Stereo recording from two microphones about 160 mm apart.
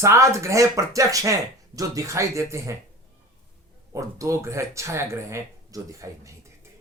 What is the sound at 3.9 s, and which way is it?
Speech, 20° right (ahead or behind).